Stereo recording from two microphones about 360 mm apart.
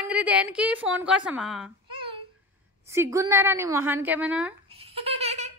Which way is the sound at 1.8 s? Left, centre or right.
Centre.